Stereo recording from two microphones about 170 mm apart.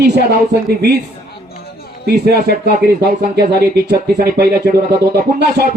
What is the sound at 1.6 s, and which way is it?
Music, 65° left (ahead or behind).